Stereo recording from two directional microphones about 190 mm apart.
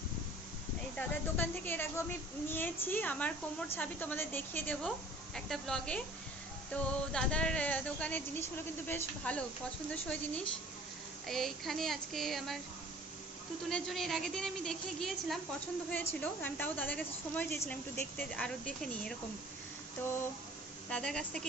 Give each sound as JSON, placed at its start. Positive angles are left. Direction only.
{"t": 0.9, "sound": "a woman's voice", "side_deg": 10}
{"t": 13.7, "sound": "a woman's voice", "side_deg": 0}
{"t": 20.9, "sound": "a woman's voice", "side_deg": 5}